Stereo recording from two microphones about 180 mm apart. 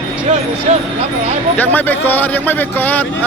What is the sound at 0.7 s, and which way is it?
Speech, 40° right (ahead or behind).